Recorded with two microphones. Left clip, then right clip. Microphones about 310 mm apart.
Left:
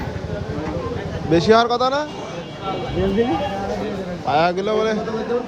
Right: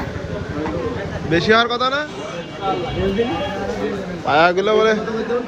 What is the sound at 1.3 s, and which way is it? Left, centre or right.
Speech, centre.